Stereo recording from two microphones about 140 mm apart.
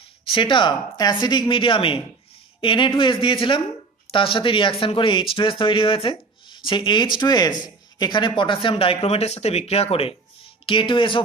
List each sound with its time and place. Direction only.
0.2 s speech: 40° left (ahead or behind)